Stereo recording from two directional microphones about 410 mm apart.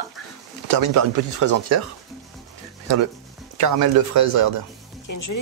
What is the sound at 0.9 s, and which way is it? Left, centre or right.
Speech, right.